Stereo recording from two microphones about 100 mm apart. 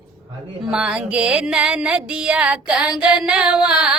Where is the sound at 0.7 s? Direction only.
10° right (ahead or behind).